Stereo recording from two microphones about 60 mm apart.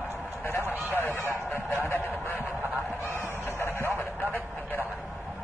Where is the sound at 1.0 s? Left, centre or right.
Left.